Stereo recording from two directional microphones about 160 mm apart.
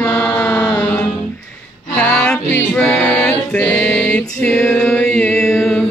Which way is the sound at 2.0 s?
5° left (ahead or behind).